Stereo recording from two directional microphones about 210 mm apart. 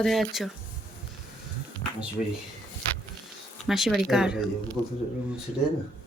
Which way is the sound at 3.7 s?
Centre (ahead or behind).